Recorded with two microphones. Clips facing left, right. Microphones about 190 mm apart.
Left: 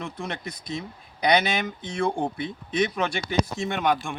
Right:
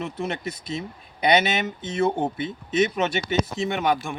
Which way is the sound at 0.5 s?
25° right (ahead or behind).